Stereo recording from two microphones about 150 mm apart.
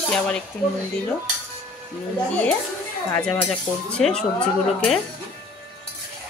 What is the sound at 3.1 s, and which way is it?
Speech, 10° left (ahead or behind).